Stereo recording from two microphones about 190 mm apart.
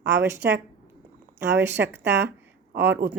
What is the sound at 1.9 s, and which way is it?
Speech, 65° right (ahead or behind).